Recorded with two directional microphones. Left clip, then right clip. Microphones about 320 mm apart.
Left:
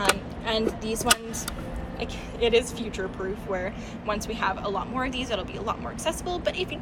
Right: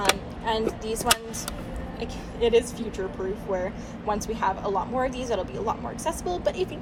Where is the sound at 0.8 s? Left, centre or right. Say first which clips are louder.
Even; right.